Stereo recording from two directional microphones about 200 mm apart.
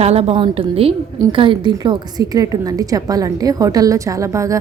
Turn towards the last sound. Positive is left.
turn(degrees=-15)  # may be behind; listen again after turning